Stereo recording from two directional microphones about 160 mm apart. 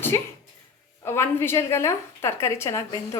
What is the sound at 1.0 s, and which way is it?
A woman's voice, 15° left (ahead or behind).